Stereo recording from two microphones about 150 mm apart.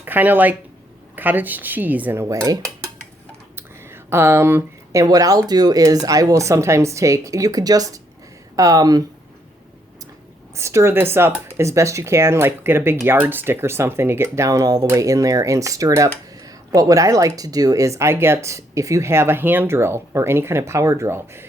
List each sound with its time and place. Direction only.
0.0 s speech: 10° right (ahead or behind)
1.1 s dishes: 10° right (ahead or behind)
3.5 s speech: 15° right (ahead or behind)
10.5 s speech: 20° right (ahead or behind)